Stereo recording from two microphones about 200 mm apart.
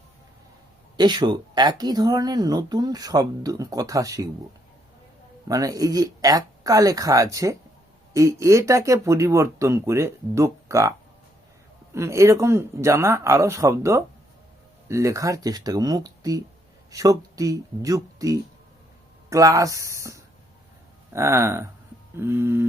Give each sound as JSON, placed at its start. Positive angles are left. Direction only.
{"t": 0.9, "sound": "speech", "side_deg": -20}
{"t": 5.5, "sound": "speech", "side_deg": -15}
{"t": 11.9, "sound": "speech", "side_deg": -15}